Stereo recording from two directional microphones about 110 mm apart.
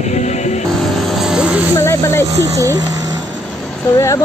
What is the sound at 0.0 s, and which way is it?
Music, 90° left.